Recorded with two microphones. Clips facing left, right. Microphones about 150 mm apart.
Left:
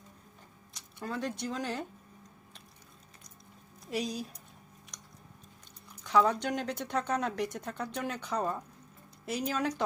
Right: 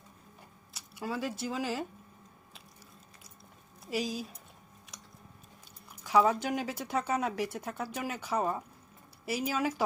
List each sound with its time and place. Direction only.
0.7 s speech: 5° right (ahead or behind)
3.8 s speech: centre (ahead or behind)
4.9 s a sound: centre (ahead or behind)
6.0 s speech: 5° right (ahead or behind)